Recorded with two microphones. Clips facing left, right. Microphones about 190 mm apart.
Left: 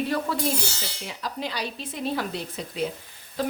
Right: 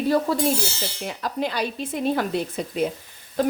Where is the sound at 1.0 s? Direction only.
55° right (ahead or behind).